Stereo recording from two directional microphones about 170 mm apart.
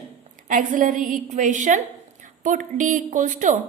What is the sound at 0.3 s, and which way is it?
Speech, 50° right (ahead or behind).